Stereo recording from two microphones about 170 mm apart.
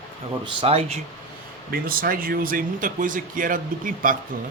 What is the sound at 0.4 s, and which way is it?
Speech, 35° right (ahead or behind).